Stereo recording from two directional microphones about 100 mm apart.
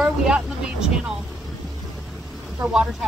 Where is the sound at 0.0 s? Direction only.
5° right (ahead or behind).